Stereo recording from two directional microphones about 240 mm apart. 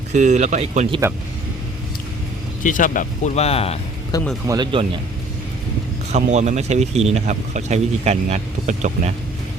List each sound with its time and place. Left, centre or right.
0.1 s speech: right
2.6 s speech: left
4.4 s speech: centre
6.1 s speech: right